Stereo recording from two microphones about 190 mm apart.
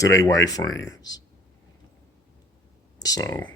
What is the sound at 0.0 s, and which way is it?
A man's voice, 15° left (ahead or behind).